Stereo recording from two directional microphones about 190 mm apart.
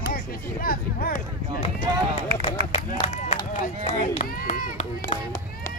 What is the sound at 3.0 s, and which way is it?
Run, 35° left (ahead or behind).